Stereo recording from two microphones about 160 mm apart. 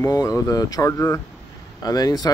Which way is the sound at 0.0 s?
20° left (ahead or behind).